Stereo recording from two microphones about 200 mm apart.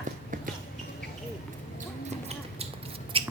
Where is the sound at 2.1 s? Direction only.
30° right (ahead or behind).